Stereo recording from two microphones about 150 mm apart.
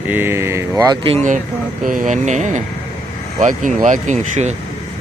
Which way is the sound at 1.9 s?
60° right (ahead or behind).